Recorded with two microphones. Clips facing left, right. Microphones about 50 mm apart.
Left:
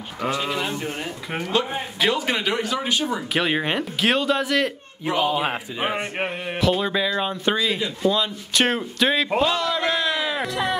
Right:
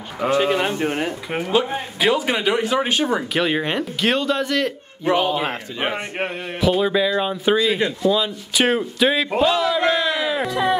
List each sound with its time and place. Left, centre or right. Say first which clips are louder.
0.3 s speech: right 7 dB; right
1.3 s a man's voice: right 2 dB; centre
2.8 s speech: right 4 dB; right
3.3 s a man's voice: left 1 dB; centre